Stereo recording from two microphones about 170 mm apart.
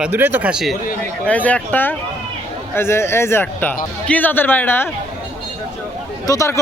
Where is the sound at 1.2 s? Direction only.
10° left (ahead or behind).